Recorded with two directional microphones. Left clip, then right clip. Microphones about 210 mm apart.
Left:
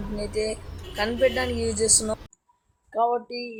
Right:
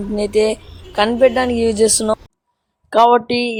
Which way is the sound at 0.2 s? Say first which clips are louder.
Right 12 dB; 40° right (ahead or behind).